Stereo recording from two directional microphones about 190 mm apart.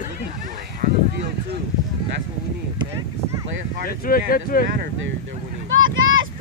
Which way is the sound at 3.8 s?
50° left (ahead or behind).